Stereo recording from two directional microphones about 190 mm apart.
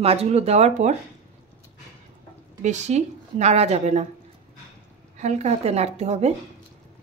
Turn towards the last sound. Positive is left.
turn(degrees=-35)  # may be behind; listen again after turning